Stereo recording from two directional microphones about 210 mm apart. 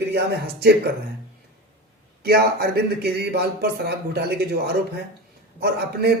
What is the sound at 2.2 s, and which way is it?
Speech, 45° right (ahead or behind).